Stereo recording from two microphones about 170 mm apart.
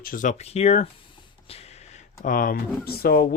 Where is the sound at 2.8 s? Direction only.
65° left (ahead or behind).